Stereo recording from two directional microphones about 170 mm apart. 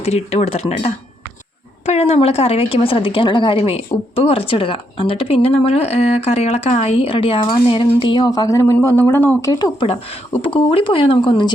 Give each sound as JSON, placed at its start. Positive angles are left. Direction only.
{"t": 0.0, "sound": "a woman's voice", "side_deg": 40}
{"t": 10.4, "sound": "speech", "side_deg": 30}